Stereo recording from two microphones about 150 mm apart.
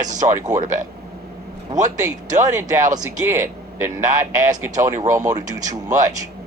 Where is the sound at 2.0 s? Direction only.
25° right (ahead or behind).